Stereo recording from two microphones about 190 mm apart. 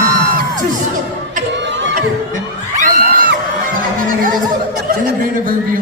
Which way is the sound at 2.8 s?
45° right (ahead or behind).